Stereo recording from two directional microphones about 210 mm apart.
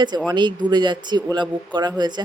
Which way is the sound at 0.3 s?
20° right (ahead or behind).